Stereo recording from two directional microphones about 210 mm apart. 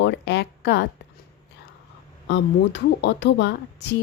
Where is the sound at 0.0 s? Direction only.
55° left (ahead or behind).